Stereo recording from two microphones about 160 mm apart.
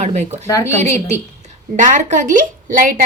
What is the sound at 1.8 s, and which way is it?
A woman's voice, 50° right (ahead or behind).